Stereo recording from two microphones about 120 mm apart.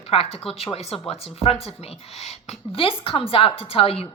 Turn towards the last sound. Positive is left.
turn(degrees=50)  # may be behind; listen again after turning